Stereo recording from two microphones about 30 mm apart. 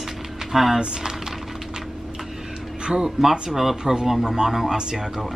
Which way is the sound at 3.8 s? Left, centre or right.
Right.